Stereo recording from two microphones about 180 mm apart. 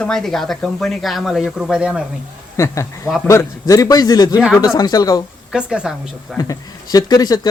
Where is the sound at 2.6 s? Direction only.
15° left (ahead or behind).